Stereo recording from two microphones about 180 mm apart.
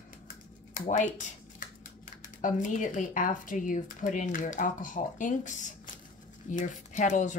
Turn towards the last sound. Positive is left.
turn(degrees=45)  # may be behind; listen again after turning